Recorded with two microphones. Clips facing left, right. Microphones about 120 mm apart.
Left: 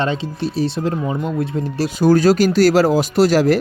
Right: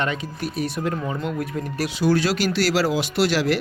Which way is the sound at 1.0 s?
15° left (ahead or behind).